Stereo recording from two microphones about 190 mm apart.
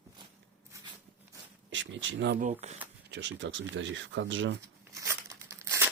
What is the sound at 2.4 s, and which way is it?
Speech, 35° right (ahead or behind).